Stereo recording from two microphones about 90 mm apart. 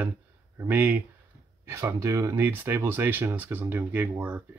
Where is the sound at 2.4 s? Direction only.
25° right (ahead or behind).